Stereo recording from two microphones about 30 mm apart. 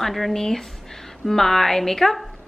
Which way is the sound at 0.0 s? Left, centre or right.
Centre.